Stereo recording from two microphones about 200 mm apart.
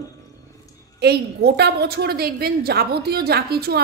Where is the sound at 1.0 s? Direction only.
55° right (ahead or behind).